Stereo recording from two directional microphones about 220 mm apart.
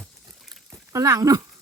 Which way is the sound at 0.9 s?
15° right (ahead or behind).